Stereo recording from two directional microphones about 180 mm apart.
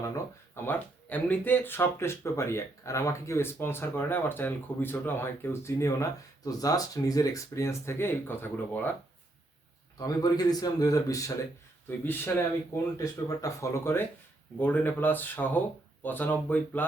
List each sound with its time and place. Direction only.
0.5 s speech: 10° left (ahead or behind)
10.0 s speech: 20° left (ahead or behind)